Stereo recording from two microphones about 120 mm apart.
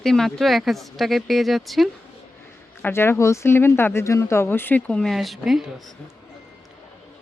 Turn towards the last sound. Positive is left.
turn(degrees=0)  # may be behind; listen again after turning